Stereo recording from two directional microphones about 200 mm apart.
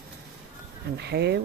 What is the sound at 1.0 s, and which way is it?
Speech, 55° right (ahead or behind).